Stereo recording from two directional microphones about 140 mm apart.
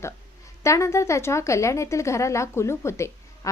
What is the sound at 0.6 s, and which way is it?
A woman's voice, 20° left (ahead or behind).